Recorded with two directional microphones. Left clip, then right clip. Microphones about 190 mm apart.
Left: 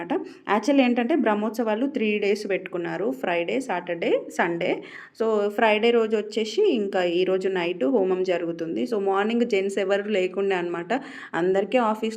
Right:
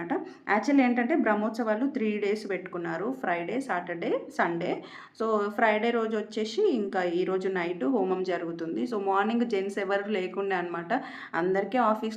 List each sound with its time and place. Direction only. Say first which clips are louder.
0.1 s speech: left 3 dB; 15° left (ahead or behind)